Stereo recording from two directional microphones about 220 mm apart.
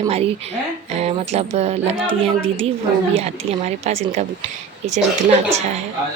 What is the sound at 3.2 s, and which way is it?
Speech, 30° right (ahead or behind).